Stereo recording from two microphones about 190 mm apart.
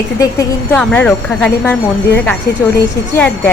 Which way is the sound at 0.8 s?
5° left (ahead or behind).